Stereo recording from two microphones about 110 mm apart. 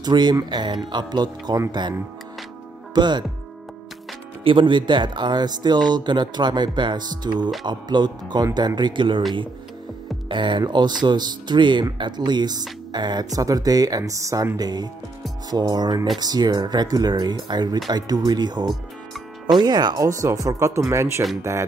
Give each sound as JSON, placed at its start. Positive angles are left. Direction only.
{"t": 0.0, "sound": "speech", "side_deg": -40}
{"t": 4.5, "sound": "speech", "side_deg": -45}
{"t": 10.2, "sound": "speech", "side_deg": -45}